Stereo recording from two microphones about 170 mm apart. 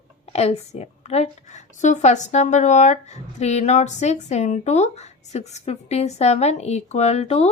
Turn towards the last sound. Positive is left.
turn(degrees=40)  # may be behind; listen again after turning